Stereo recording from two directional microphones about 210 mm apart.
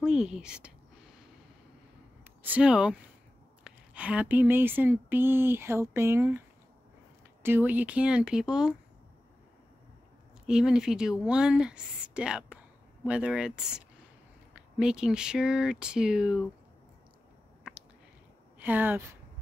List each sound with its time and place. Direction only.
0.0 s speech: 5° right (ahead or behind)
2.4 s speech: 5° right (ahead or behind)
7.4 s speech: 10° right (ahead or behind)
10.4 s speech: 5° right (ahead or behind)
17.6 s a sound: 5° right (ahead or behind)
18.6 s speech: 10° right (ahead or behind)